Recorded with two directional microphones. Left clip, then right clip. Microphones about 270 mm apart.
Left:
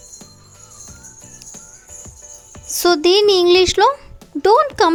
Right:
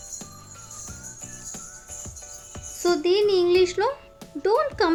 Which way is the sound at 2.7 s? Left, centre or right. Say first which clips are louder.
Left 8 dB; left.